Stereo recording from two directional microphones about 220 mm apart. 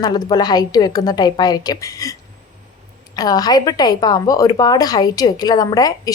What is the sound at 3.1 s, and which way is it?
A woman's voice, 15° left (ahead or behind).